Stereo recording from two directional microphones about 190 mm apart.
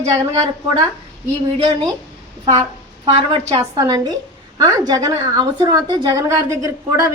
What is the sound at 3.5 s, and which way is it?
A woman's voice, 20° right (ahead or behind).